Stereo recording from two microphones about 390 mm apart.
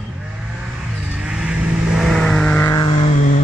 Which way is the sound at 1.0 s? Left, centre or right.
Centre.